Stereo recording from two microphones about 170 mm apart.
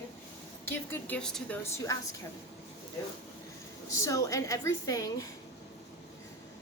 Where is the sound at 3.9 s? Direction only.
20° left (ahead or behind).